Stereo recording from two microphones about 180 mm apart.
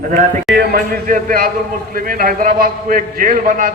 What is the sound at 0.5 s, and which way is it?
A man's voice, 50° right (ahead or behind).